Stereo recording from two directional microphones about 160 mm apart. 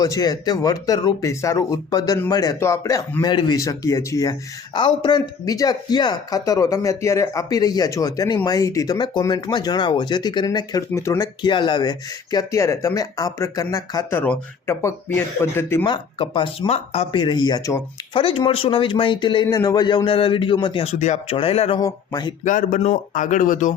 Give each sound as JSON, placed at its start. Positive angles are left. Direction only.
{"t": 0.0, "sound": "speech", "side_deg": 25}
{"t": 11.4, "sound": "speech", "side_deg": 30}
{"t": 15.8, "sound": "a man's voice", "side_deg": 30}
{"t": 18.1, "sound": "a man's voice", "side_deg": 35}
{"t": 21.8, "sound": "speech", "side_deg": 25}
{"t": 22.4, "sound": "speech", "side_deg": 50}